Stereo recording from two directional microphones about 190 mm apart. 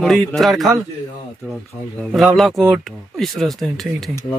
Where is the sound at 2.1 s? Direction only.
Centre (ahead or behind).